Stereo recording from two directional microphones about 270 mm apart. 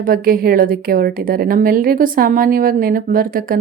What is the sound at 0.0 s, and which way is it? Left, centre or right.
A woman's voice, right.